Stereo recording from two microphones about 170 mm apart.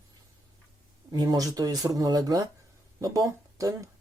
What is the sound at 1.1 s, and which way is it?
Speech, 25° right (ahead or behind).